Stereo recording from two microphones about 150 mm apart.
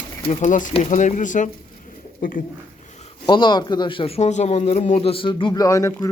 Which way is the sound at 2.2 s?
70° left (ahead or behind).